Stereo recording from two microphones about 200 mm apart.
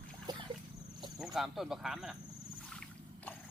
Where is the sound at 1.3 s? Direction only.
Centre (ahead or behind).